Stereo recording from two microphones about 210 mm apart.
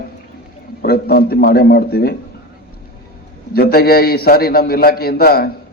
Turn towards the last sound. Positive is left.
turn(degrees=45)  # may be behind; listen again after turning